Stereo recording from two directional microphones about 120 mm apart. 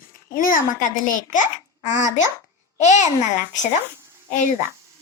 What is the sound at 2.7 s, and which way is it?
Speech, 80° left.